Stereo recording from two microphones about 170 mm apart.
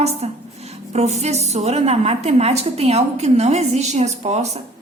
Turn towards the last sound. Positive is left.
turn(degrees=-40)  # may be behind; listen again after turning